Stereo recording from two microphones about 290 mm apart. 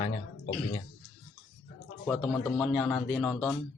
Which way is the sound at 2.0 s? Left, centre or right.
Centre.